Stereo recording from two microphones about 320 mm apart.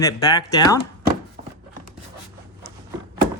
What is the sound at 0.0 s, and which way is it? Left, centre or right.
Speech, centre.